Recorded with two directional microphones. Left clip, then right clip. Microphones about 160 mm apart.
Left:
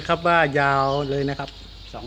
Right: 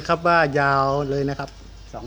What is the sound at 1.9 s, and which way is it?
Speech, 50° right (ahead or behind).